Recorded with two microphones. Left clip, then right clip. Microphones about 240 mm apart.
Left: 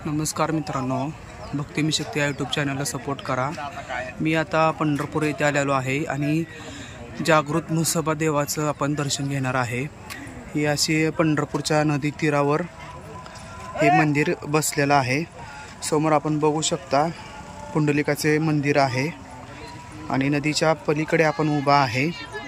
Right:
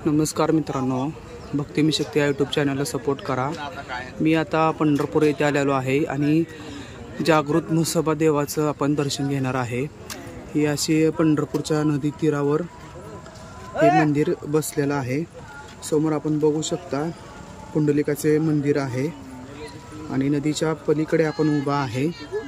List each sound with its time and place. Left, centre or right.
0.0 s speech: centre
13.7 s speech: centre
14.1 s speech: centre